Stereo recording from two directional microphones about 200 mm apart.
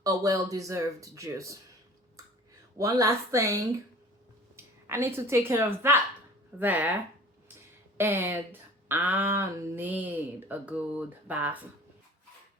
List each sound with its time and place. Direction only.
0.0 s speech: 20° right (ahead or behind)
2.7 s a woman's voice: 15° right (ahead or behind)